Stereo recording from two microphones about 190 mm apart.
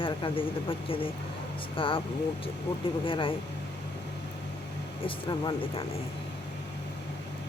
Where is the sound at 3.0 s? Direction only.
25° left (ahead or behind).